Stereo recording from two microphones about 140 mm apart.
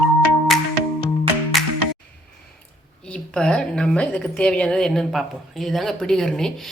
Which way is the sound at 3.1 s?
5° left (ahead or behind).